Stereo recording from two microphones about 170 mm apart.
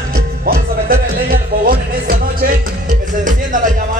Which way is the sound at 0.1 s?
60° right (ahead or behind).